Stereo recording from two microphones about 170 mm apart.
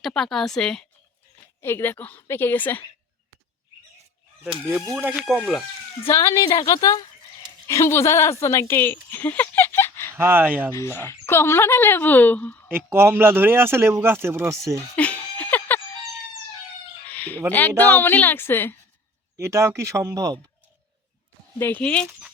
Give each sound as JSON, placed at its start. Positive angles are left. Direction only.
{"t": 0.0, "sound": "a woman's voice", "side_deg": 5}
{"t": 4.9, "sound": "a woman's voice", "side_deg": -10}
{"t": 6.1, "sound": "a woman's voice", "side_deg": 15}
{"t": 10.2, "sound": "speech", "side_deg": -15}
{"t": 10.7, "sound": "speech", "side_deg": 15}
{"t": 12.6, "sound": "speech", "side_deg": -15}
{"t": 14.9, "sound": "laughter", "side_deg": 10}
{"t": 17.1, "sound": "chicken", "side_deg": 10}
{"t": 17.5, "sound": "speech", "side_deg": 10}
{"t": 19.4, "sound": "speech", "side_deg": -15}
{"t": 21.6, "sound": "speech", "side_deg": 10}